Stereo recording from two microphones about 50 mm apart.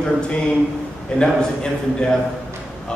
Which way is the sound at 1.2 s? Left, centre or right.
Centre.